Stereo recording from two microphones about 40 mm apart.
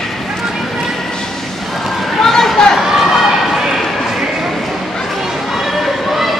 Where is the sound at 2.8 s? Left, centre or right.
Centre.